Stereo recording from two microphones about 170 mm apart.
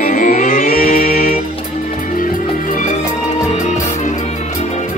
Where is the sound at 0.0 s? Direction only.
50° left (ahead or behind).